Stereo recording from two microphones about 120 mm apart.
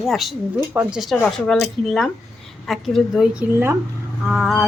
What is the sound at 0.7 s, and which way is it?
Speech, 15° right (ahead or behind).